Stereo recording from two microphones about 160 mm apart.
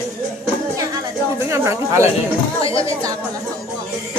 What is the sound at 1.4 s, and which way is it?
Speech, 20° right (ahead or behind).